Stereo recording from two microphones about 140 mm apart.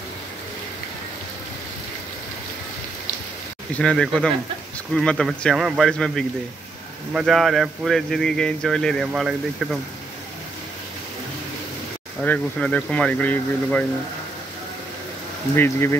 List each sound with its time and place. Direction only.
3.7 s speech: 5° left (ahead or behind)
12.2 s speech: 5° left (ahead or behind)
15.5 s speech: 15° left (ahead or behind)